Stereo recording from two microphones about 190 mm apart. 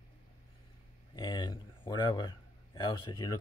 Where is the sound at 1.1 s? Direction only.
20° left (ahead or behind).